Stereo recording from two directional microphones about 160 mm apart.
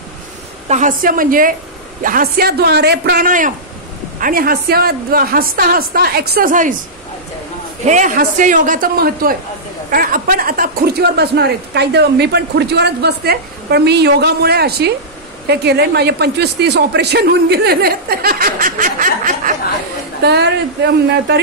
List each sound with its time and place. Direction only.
0.7 s a man's voice: 50° right (ahead or behind)
7.8 s a man's voice: 50° right (ahead or behind)
20.2 s a woman's voice: 90° right